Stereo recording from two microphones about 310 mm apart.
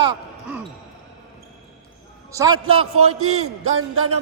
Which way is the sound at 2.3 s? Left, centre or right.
Centre.